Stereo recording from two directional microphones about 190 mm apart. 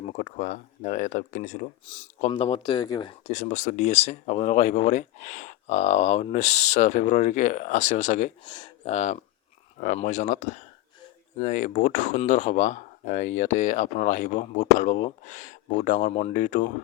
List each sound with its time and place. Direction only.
0.0 s speech: 40° left (ahead or behind)
1.9 s speech: 30° left (ahead or behind)
8.4 s speech: 25° left (ahead or behind); by 16.7 s 40° left (ahead or behind)